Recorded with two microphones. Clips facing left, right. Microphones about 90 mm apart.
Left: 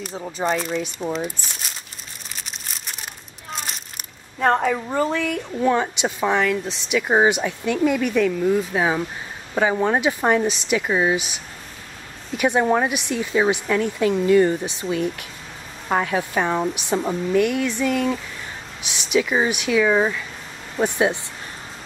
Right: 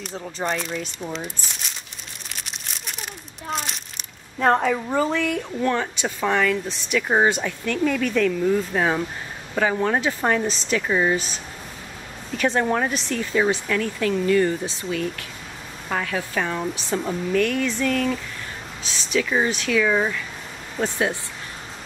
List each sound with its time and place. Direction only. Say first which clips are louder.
0.2 s speech: left 4 dB; 5° left (ahead or behind)
2.3 s crumpling: even; centre (ahead or behind)
3.5 s a sound: right 2 dB; centre (ahead or behind)
4.4 s a woman's voice: even; centre (ahead or behind); by 21.2 s 20° left (ahead or behind)